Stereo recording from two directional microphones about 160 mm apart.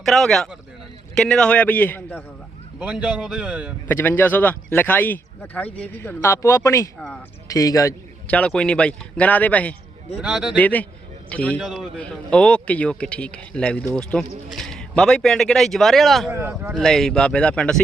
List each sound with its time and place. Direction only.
0.0 s a man's voice: centre (ahead or behind)
2.7 s speech: 5° right (ahead or behind)
3.8 s a man's voice: 10° left (ahead or behind)
8.3 s a man's voice: 10° left (ahead or behind)
10.2 s speech: 5° right (ahead or behind)
10.6 s a man's voice: 10° left (ahead or behind)
16.3 s speech: 15° right (ahead or behind)
16.7 s speech: 5° left (ahead or behind)